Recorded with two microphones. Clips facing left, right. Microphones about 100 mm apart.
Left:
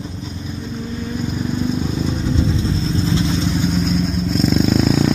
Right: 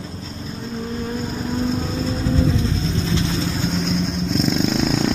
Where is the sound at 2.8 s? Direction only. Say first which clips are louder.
Left 3 dB; 25° left (ahead or behind).